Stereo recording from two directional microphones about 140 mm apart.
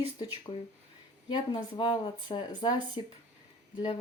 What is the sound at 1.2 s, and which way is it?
Speech, 30° left (ahead or behind).